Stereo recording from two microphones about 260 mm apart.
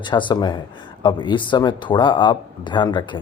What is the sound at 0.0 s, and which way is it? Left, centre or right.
Speech, centre.